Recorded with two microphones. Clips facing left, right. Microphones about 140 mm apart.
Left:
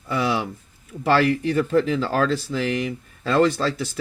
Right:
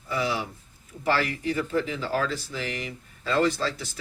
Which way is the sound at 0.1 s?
65° left (ahead or behind).